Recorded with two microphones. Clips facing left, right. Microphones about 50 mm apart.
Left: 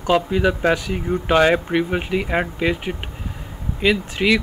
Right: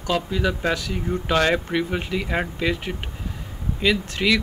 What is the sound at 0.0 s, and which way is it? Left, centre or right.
Speech, left.